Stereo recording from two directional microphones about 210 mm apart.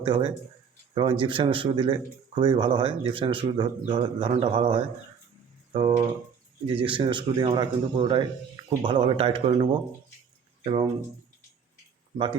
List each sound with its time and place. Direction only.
0.0 s speech: 25° right (ahead or behind)
12.1 s speech: 25° right (ahead or behind)